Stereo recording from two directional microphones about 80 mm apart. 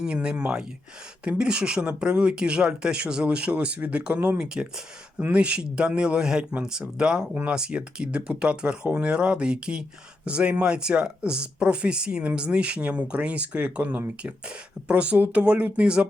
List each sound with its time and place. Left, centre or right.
0.0 s speech: centre
4.4 s speech: centre